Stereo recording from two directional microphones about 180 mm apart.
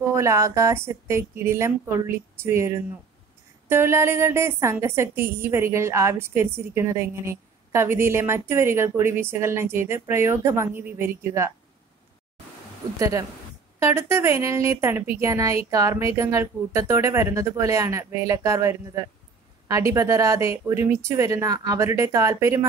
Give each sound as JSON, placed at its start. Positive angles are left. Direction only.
{"t": 0.1, "sound": "a woman's voice", "side_deg": -15}
{"t": 13.7, "sound": "a woman's voice", "side_deg": -15}